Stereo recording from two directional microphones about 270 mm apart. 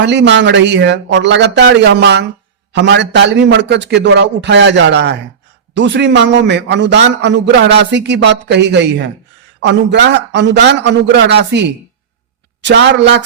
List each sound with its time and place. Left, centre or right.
0.0 s a man's voice: right